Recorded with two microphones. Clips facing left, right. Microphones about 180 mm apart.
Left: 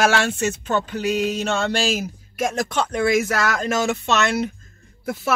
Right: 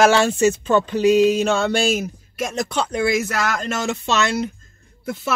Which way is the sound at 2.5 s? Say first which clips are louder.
Right 4 dB; centre (ahead or behind).